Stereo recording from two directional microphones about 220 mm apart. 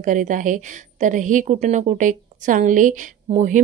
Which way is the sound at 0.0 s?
35° right (ahead or behind).